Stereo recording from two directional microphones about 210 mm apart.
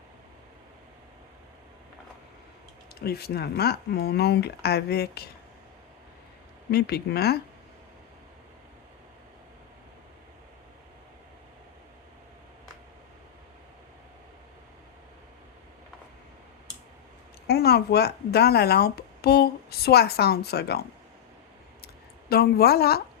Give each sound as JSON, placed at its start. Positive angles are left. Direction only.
{"t": 2.9, "sound": "speech", "side_deg": 50}
{"t": 6.7, "sound": "speech", "side_deg": 50}
{"t": 17.4, "sound": "speech", "side_deg": 50}
{"t": 22.3, "sound": "speech", "side_deg": 45}